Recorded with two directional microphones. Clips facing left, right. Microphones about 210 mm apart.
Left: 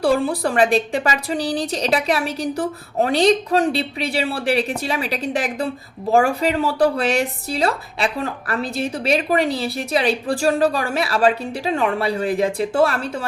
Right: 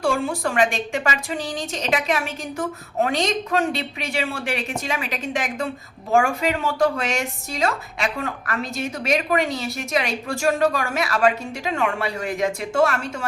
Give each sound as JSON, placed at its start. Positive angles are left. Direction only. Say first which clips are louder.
{"t": 0.0, "sound": "speech", "louder": "left 4 dB", "side_deg": 35}